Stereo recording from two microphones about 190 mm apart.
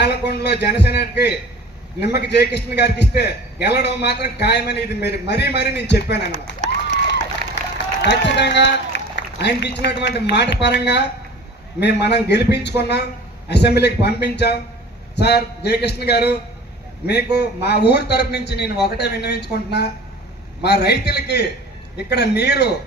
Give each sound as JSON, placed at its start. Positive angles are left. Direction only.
{"t": 0.0, "sound": "a man's voice", "side_deg": 60}
{"t": 6.8, "sound": "a sound", "side_deg": 65}
{"t": 8.0, "sound": "a man's voice", "side_deg": 65}
{"t": 17.3, "sound": "a man's voice", "side_deg": 60}